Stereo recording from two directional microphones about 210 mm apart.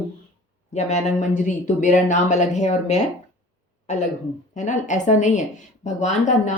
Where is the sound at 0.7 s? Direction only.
35° left (ahead or behind).